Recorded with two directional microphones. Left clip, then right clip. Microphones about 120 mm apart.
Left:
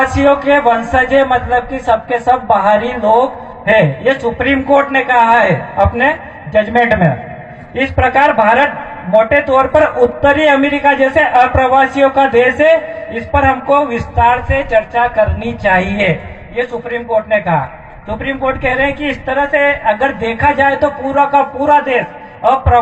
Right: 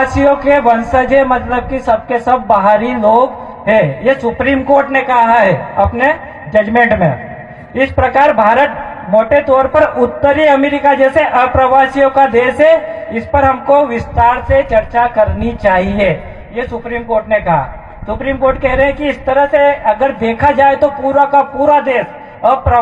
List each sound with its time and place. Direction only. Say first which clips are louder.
0.0 s a woman's voice: even; 45° right (ahead or behind)
8.1 s a woman's voice: right 1 dB; 45° right (ahead or behind)